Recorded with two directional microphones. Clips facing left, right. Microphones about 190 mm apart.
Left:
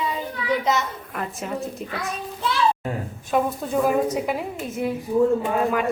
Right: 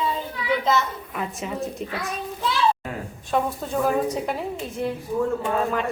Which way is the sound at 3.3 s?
5° left (ahead or behind).